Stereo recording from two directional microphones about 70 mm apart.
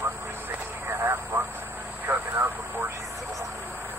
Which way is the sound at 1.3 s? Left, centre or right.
Right.